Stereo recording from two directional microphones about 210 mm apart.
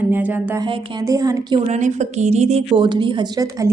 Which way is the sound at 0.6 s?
25° right (ahead or behind).